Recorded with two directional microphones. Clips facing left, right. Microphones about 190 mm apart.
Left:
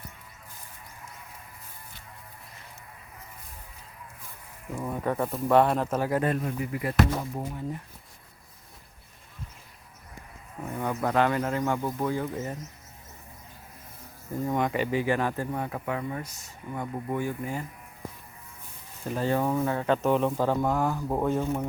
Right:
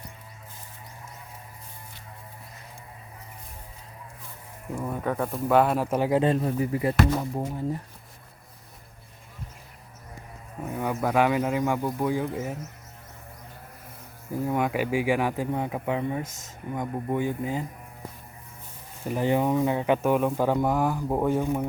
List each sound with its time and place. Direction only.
4.8 s speech: centre (ahead or behind); by 6.9 s 30° right (ahead or behind)
10.7 s speech: 10° right (ahead or behind)
14.3 s speech: 5° right (ahead or behind)
19.0 s speech: 15° right (ahead or behind)